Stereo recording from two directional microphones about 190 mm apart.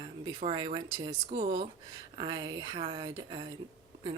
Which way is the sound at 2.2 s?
25° right (ahead or behind).